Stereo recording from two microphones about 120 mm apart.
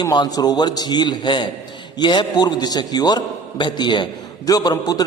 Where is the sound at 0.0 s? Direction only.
35° left (ahead or behind).